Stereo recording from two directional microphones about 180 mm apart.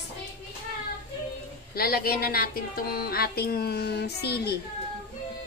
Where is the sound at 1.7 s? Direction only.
55° left (ahead or behind).